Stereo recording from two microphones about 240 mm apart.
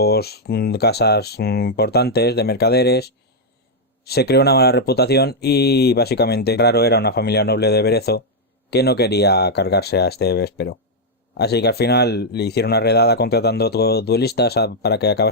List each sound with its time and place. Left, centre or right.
0.0 s speech: left